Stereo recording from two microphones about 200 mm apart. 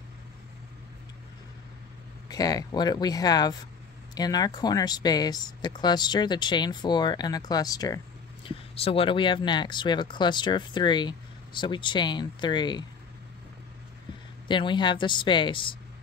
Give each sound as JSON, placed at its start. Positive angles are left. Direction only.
{"t": 2.2, "sound": "speech", "side_deg": 20}
{"t": 14.5, "sound": "speech", "side_deg": 25}